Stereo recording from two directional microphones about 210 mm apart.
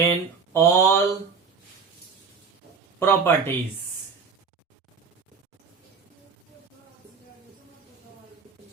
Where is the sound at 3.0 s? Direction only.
10° left (ahead or behind).